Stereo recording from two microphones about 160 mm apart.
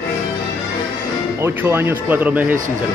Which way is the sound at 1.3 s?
15° right (ahead or behind).